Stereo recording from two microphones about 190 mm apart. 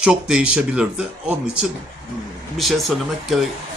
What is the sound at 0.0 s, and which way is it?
Speech, 5° right (ahead or behind).